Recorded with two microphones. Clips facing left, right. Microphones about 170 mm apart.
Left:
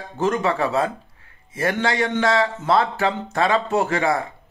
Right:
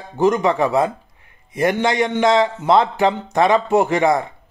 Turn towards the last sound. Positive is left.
turn(degrees=-20)  # may be behind; listen again after turning